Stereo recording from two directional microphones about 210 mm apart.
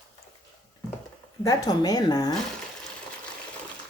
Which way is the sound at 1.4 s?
15° left (ahead or behind).